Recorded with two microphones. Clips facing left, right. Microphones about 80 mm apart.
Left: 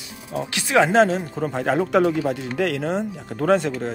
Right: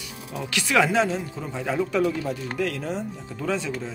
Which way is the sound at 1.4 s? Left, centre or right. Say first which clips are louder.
Left 6 dB; left.